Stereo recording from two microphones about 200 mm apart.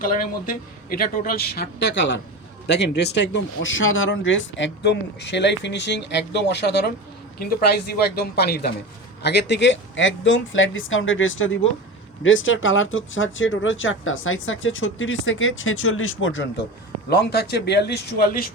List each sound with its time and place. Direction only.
0.0 s speech: 45° left (ahead or behind); by 16.6 s 70° left (ahead or behind)
17.1 s speech: 55° left (ahead or behind)